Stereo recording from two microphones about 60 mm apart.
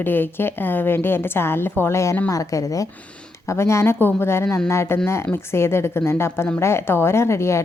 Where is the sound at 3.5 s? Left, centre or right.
Left.